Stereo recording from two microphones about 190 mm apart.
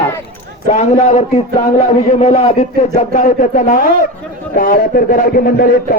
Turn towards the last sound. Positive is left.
turn(degrees=50)  # may be behind; listen again after turning